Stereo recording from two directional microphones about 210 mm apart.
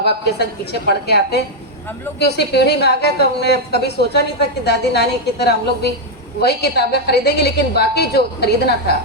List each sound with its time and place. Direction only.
0.0 s a woman's voice: 50° left (ahead or behind)